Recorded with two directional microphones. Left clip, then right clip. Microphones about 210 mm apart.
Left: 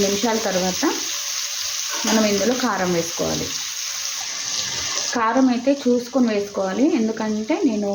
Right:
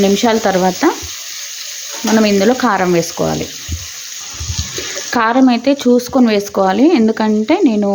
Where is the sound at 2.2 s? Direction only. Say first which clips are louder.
Right 7 dB; 45° right (ahead or behind).